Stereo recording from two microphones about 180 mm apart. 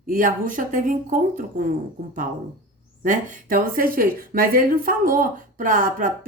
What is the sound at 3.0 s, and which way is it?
Speech, 50° right (ahead or behind).